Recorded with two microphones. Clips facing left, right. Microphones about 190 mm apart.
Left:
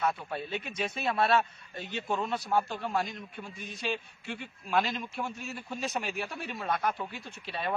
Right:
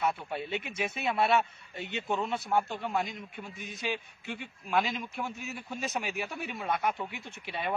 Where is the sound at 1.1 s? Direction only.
20° right (ahead or behind).